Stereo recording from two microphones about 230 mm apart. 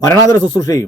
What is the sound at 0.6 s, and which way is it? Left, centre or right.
Speech, centre.